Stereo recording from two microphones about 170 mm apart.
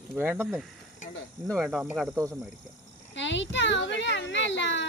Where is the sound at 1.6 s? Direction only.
10° right (ahead or behind).